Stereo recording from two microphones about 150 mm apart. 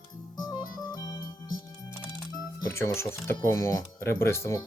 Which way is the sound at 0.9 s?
25° left (ahead or behind).